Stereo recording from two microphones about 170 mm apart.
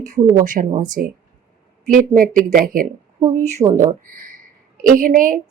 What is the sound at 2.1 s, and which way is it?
Speech, 55° right (ahead or behind).